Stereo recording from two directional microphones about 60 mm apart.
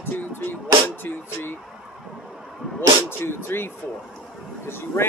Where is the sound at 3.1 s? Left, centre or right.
Left.